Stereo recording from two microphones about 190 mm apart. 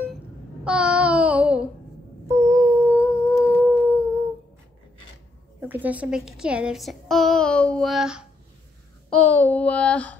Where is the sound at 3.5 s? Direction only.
10° right (ahead or behind).